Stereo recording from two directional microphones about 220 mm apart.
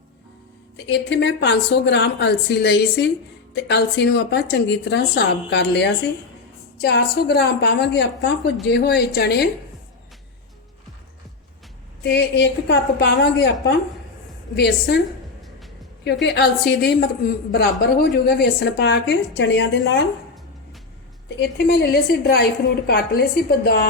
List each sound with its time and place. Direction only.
0.9 s a woman's voice: 55° left (ahead or behind)
12.0 s a woman's voice: 50° left (ahead or behind)
16.2 s a woman's voice: 50° left (ahead or behind)
21.2 s a woman's voice: 50° left (ahead or behind)